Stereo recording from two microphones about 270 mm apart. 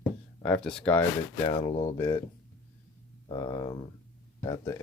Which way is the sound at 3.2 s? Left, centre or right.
Centre.